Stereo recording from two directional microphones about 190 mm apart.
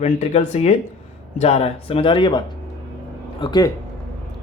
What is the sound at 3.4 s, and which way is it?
Speech, 20° left (ahead or behind).